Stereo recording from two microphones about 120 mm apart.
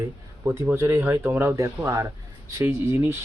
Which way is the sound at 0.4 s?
25° right (ahead or behind).